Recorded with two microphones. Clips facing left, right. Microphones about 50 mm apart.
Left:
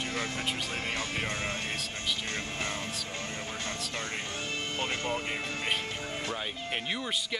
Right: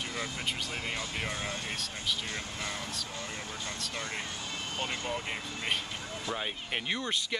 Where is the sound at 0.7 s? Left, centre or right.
Left.